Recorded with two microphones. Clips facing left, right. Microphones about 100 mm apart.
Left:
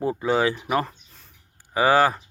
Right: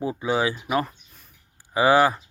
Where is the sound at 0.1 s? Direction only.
50° left (ahead or behind).